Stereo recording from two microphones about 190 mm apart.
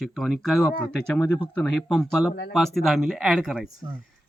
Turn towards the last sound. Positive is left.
turn(degrees=0)  # may be behind; listen again after turning